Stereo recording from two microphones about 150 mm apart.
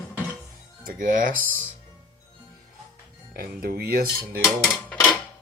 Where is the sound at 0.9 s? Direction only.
65° right (ahead or behind).